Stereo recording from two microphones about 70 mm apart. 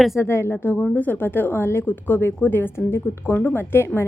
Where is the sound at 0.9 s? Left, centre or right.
Left.